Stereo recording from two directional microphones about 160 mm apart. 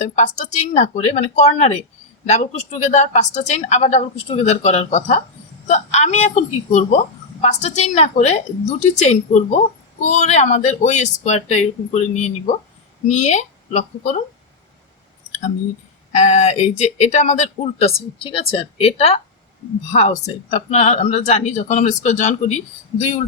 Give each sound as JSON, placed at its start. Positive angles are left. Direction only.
{"t": 0.0, "sound": "speech", "side_deg": 50}
{"t": 16.1, "sound": "speech", "side_deg": 45}